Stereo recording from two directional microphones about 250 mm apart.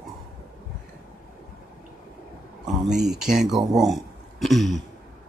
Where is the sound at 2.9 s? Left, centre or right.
Right.